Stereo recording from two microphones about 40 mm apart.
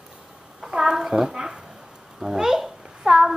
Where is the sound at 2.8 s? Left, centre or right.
Centre.